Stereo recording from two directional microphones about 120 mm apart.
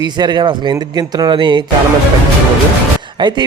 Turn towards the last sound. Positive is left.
turn(degrees=-40)  # may be behind; listen again after turning